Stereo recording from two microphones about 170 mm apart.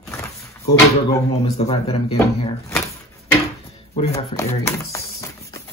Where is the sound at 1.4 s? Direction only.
35° left (ahead or behind).